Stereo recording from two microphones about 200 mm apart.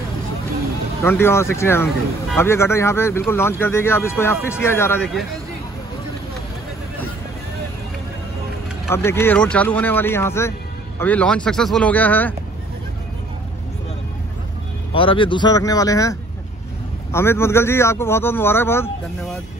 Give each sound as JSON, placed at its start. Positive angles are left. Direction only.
{"t": 1.0, "sound": "speech", "side_deg": 10}
{"t": 8.9, "sound": "speech", "side_deg": 10}
{"t": 14.9, "sound": "speech", "side_deg": 25}